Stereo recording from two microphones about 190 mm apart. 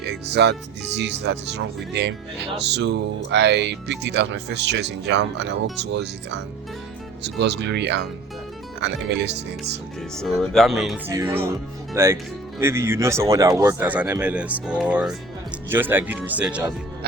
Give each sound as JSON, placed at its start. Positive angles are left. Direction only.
{"t": 0.0, "sound": "speech", "side_deg": -60}
{"t": 10.2, "sound": "speech", "side_deg": 0}
{"t": 11.1, "sound": "speech", "side_deg": -15}